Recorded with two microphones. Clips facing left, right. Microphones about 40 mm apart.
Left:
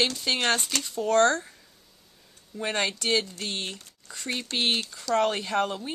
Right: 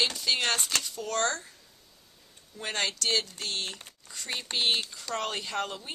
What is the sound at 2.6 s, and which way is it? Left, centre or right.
Speech, centre.